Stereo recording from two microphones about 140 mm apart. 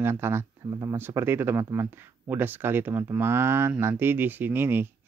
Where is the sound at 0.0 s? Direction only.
15° right (ahead or behind).